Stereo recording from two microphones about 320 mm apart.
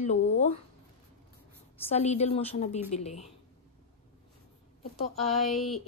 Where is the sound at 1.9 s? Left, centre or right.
Centre.